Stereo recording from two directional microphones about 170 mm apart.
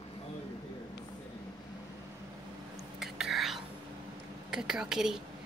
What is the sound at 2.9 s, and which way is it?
Whispering, centre (ahead or behind).